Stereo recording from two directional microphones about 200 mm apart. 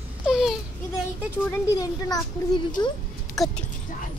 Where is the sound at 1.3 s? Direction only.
15° left (ahead or behind).